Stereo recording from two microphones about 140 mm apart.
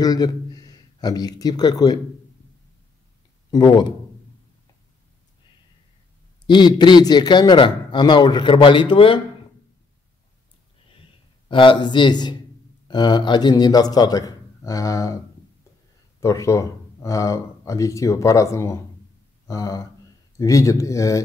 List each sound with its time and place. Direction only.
0.0 s speech: 25° left (ahead or behind)
3.5 s a man's voice: 30° left (ahead or behind)
6.4 s a man's voice: 35° left (ahead or behind)
11.4 s a man's voice: 35° left (ahead or behind)
16.2 s speech: 20° left (ahead or behind)